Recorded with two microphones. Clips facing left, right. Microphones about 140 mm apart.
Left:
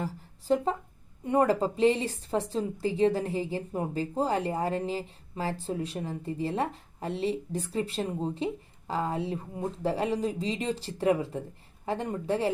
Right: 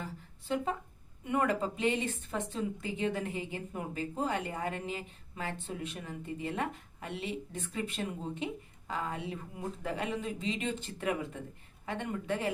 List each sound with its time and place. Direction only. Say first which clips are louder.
0.0 s a woman's voice: left 7 dB; 35° left (ahead or behind)